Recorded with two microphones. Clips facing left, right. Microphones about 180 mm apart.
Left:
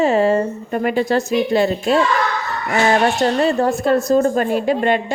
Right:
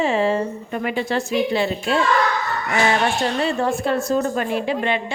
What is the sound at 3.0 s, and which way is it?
A woman's voice, 40° left (ahead or behind).